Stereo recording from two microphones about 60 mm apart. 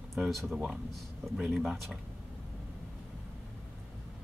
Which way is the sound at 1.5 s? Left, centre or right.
Centre.